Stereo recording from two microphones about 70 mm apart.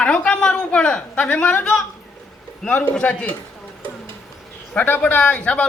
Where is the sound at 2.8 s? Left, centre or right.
Centre.